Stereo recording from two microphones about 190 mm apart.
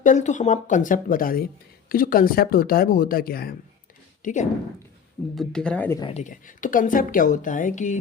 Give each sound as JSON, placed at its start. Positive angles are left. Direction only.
{"t": 0.0, "sound": "a woman's voice", "side_deg": 40}
{"t": 4.2, "sound": "a woman's voice", "side_deg": 40}
{"t": 5.3, "sound": "speech", "side_deg": 0}
{"t": 6.0, "sound": "speech", "side_deg": 30}
{"t": 6.2, "sound": "a woman's voice", "side_deg": 45}